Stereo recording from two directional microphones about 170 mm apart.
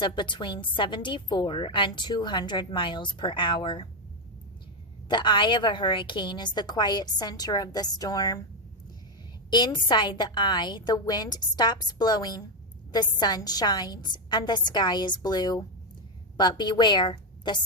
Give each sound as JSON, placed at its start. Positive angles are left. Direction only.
{"t": 0.0, "sound": "a woman's voice", "side_deg": 30}
{"t": 5.0, "sound": "a woman's voice", "side_deg": 30}
{"t": 9.5, "sound": "a woman's voice", "side_deg": 25}